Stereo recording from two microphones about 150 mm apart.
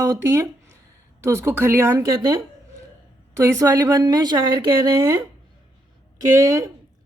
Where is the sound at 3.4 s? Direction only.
20° right (ahead or behind).